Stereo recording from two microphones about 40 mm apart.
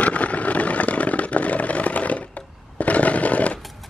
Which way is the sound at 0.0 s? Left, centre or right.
Left.